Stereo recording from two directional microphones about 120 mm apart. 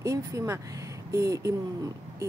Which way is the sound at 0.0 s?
25° right (ahead or behind).